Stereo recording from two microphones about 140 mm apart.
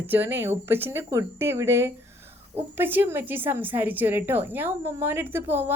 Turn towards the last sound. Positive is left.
turn(degrees=-15)  # may be behind; listen again after turning